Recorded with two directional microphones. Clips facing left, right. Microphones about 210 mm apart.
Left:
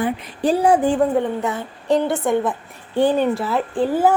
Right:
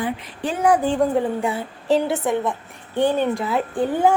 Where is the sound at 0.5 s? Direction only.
30° left (ahead or behind).